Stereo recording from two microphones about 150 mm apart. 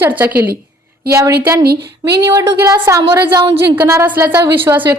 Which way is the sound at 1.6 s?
90° right.